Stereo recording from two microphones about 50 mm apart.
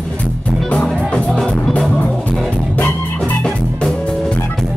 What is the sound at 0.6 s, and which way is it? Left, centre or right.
Music, left.